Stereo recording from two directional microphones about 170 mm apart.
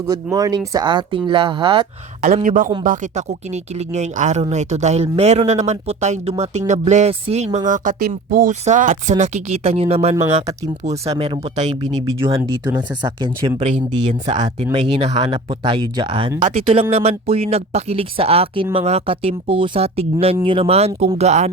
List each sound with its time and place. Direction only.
0.0 s speech: 20° right (ahead or behind)
2.2 s speech: 50° right (ahead or behind)
12.5 s speech: 25° right (ahead or behind)
13.6 s speech: 40° right (ahead or behind)